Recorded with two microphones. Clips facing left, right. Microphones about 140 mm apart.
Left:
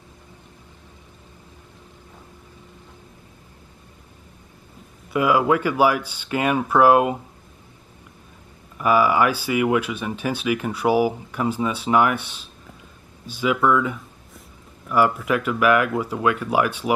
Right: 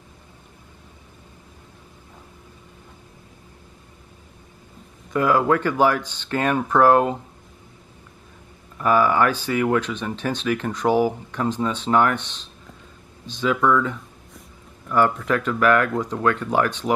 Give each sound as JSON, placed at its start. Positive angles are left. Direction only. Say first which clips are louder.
{"t": 5.1, "sound": "speech", "louder": "even", "side_deg": 10}
{"t": 8.7, "sound": "speech", "louder": "even", "side_deg": 10}